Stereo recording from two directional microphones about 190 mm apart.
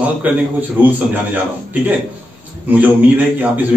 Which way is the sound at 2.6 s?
10° right (ahead or behind).